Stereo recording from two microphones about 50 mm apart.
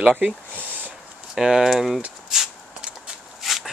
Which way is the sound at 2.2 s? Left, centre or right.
Centre.